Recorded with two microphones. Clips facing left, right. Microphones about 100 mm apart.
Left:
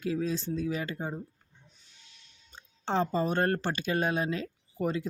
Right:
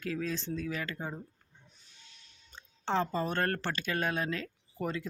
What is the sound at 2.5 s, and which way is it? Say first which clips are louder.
Speech: left 2 dB; 15° left (ahead or behind).